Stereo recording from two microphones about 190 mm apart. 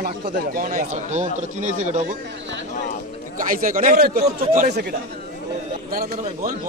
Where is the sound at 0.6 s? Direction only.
40° right (ahead or behind).